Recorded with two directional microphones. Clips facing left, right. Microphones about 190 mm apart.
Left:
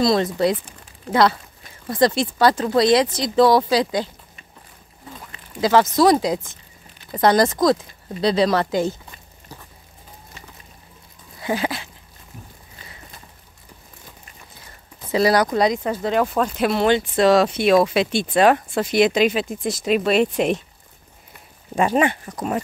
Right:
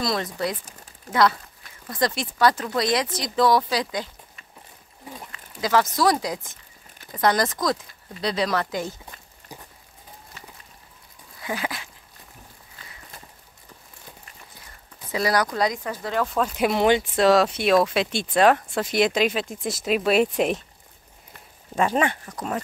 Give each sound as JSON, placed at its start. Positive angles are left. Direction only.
{"t": 0.0, "sound": "speech", "side_deg": 25}
{"t": 5.3, "sound": "a sound", "side_deg": 25}
{"t": 6.1, "sound": "speech", "side_deg": 25}
{"t": 9.5, "sound": "a sound", "side_deg": -15}
{"t": 11.4, "sound": "dog", "side_deg": 30}
{"t": 15.0, "sound": "speech", "side_deg": 25}
{"t": 16.3, "sound": "speech", "side_deg": 5}
{"t": 16.5, "sound": "speech", "side_deg": -15}
{"t": 17.2, "sound": "speech", "side_deg": 0}
{"t": 21.7, "sound": "speech", "side_deg": 10}